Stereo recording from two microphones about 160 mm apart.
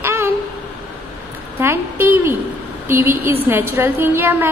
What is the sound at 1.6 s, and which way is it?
A woman's voice, 15° right (ahead or behind).